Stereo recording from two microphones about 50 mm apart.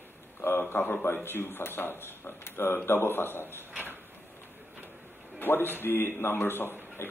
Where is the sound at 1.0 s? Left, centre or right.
Left.